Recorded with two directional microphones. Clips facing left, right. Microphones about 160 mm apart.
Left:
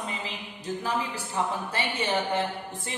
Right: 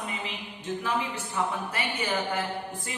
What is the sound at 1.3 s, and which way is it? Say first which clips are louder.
A woman's voice: left 1 dB; 30° left (ahead or behind).